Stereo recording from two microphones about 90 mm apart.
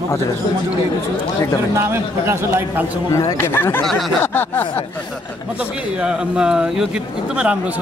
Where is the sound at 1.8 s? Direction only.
30° right (ahead or behind).